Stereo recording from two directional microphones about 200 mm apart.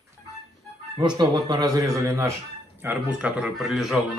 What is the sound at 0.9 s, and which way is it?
A man's voice, 20° right (ahead or behind).